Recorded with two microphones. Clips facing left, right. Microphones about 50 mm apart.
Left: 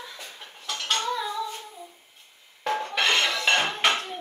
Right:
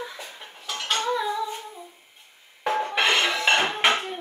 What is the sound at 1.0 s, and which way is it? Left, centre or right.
Humming, centre.